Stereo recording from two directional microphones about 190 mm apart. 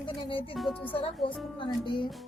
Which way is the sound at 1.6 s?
25° left (ahead or behind).